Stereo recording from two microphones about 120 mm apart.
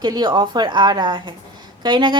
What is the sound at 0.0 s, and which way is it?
A woman's voice, 40° right (ahead or behind).